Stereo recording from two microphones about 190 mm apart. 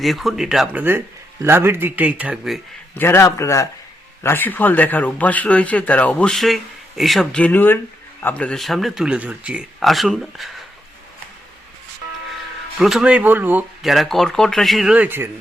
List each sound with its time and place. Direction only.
0.0 s speech: centre (ahead or behind)
3.0 s speech: 15° left (ahead or behind)
12.8 s speech: 5° right (ahead or behind)